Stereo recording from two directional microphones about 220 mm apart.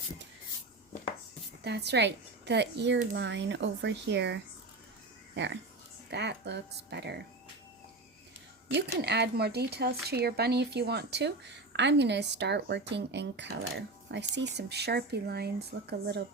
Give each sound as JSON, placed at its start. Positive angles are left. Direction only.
{"t": 1.6, "sound": "a woman's voice", "side_deg": -50}
{"t": 8.7, "sound": "speech", "side_deg": -50}